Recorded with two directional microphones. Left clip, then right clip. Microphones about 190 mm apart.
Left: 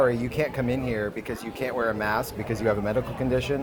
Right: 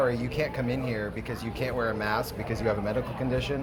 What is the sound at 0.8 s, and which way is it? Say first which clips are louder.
Speech: left 4 dB; 55° left (ahead or behind).